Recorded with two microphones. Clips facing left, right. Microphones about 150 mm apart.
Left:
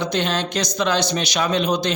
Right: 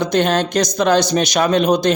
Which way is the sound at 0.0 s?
45° right (ahead or behind).